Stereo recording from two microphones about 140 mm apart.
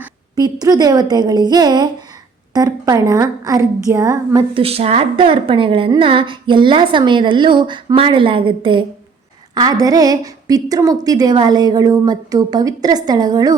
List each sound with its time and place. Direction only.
0.3 s a woman's voice: 30° right (ahead or behind)
4.5 s a woman's voice: 45° right (ahead or behind)
9.6 s a woman's voice: 25° right (ahead or behind)